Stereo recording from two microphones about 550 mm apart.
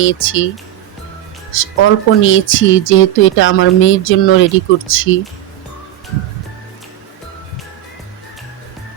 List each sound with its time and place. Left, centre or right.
0.0 s speech: left
1.5 s speech: left